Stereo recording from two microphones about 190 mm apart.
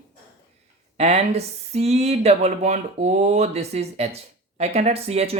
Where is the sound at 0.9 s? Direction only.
35° right (ahead or behind).